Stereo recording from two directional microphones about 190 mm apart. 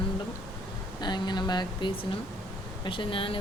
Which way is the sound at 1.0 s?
25° left (ahead or behind).